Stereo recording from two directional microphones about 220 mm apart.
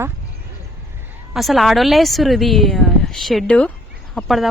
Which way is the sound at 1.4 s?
Centre (ahead or behind).